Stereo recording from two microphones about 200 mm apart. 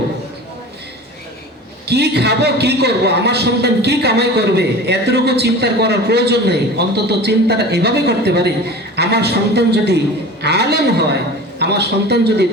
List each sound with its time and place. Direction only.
1.9 s a man's voice: 55° right (ahead or behind)